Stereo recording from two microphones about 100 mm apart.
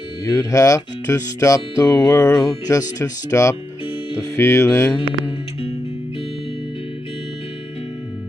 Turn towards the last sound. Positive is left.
turn(degrees=75)  # may be behind; listen again after turning